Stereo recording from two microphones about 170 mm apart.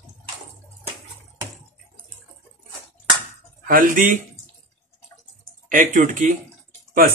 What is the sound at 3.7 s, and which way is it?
Speech, 55° right (ahead or behind).